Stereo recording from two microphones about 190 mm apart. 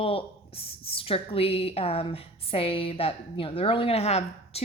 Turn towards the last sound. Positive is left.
turn(degrees=35)  # may be behind; listen again after turning